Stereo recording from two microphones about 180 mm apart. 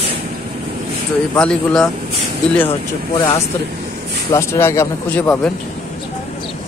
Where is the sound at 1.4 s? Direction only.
5° left (ahead or behind).